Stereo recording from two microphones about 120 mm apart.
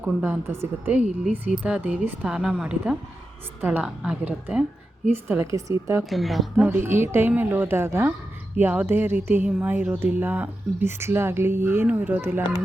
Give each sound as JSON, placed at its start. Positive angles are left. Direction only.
{"t": 0.0, "sound": "a woman's voice", "side_deg": -15}
{"t": 6.0, "sound": "a woman's voice", "side_deg": 0}
{"t": 6.6, "sound": "speech", "side_deg": -15}